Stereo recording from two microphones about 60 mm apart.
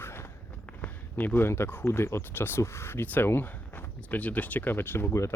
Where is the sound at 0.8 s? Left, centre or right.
Left.